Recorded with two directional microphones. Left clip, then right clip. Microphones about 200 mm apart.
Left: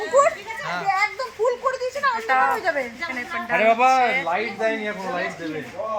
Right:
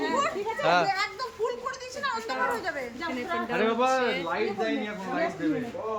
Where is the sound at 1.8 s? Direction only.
30° left (ahead or behind).